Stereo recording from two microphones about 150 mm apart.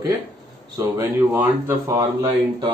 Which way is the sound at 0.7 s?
20° right (ahead or behind).